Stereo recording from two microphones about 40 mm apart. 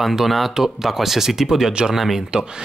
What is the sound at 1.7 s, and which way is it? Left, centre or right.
Speech, right.